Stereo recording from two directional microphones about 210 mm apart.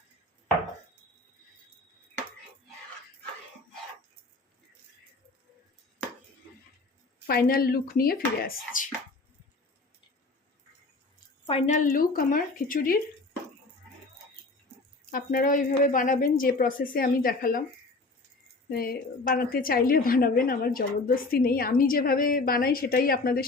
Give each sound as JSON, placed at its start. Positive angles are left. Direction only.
{"t": 7.3, "sound": "a woman's voice", "side_deg": 45}
{"t": 11.4, "sound": "speech", "side_deg": 30}
{"t": 15.1, "sound": "a woman's voice", "side_deg": 40}
{"t": 18.7, "sound": "a woman's voice", "side_deg": 45}